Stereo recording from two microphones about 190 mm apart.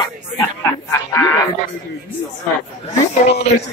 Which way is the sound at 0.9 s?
15° left (ahead or behind).